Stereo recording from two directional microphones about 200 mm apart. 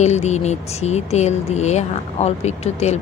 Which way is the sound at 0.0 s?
35° left (ahead or behind).